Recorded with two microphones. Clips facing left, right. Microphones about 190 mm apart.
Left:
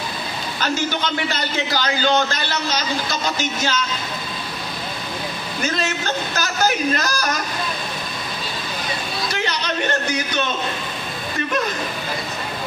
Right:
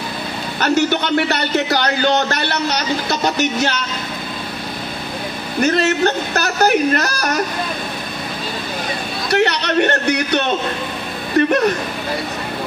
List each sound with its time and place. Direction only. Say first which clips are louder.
0.6 s speech: right 7 dB; 65° right (ahead or behind)
5.6 s speech: right 9 dB; 65° right (ahead or behind)
9.3 s a man's voice: right 11 dB; 65° right (ahead or behind)